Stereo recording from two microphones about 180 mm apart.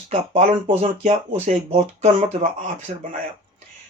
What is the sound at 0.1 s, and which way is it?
Speech, 40° right (ahead or behind).